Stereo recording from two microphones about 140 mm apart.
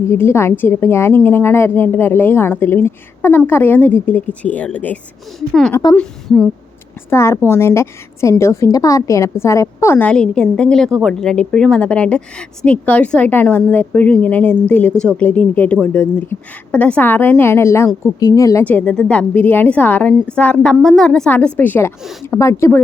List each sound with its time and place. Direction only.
0.1 s a woman's voice: 20° left (ahead or behind)
7.1 s a woman's voice: 20° left (ahead or behind)
18.6 s a woman's voice: 10° left (ahead or behind)